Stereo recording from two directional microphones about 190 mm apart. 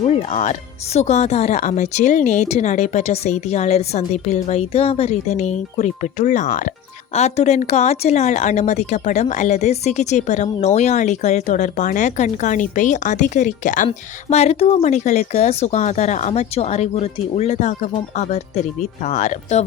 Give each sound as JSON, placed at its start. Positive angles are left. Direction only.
{"t": 0.0, "sound": "a woman's voice", "side_deg": 35}